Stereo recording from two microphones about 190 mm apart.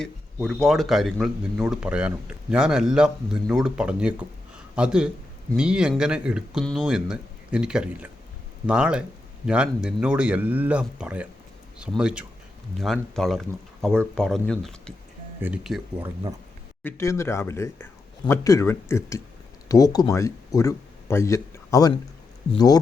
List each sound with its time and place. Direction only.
0.4 s speech: centre (ahead or behind)
16.8 s speech: 15° left (ahead or behind)